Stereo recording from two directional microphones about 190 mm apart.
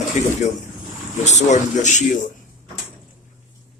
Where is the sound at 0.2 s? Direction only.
35° left (ahead or behind).